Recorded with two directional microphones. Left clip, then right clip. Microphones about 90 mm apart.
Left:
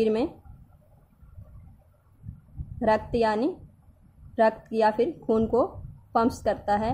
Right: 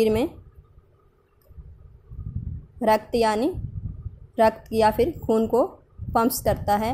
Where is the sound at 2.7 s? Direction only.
25° right (ahead or behind).